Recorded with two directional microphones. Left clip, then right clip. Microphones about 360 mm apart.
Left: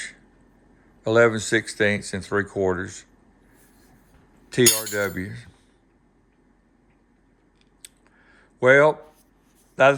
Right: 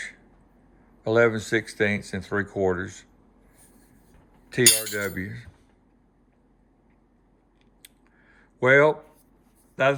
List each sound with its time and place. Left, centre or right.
1.0 s speech: centre
4.4 s cutlery: centre
7.8 s a sound: centre
9.8 s speech: centre